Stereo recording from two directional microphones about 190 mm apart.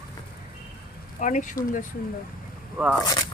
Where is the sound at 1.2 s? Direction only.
40° left (ahead or behind).